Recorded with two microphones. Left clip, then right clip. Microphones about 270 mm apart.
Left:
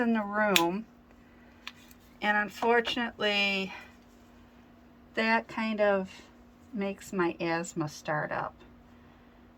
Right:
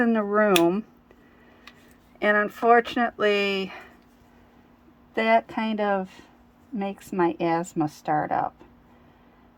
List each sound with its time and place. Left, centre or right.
0.0 s a woman's voice: right
2.1 s a woman's voice: centre
5.1 s a woman's voice: right